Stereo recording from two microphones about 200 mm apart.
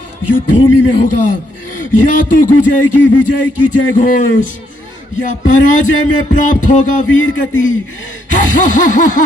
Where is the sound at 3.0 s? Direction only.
70° left (ahead or behind).